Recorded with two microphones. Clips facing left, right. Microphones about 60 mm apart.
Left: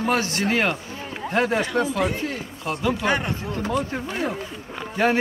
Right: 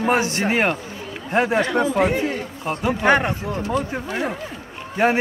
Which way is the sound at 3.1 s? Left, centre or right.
Right.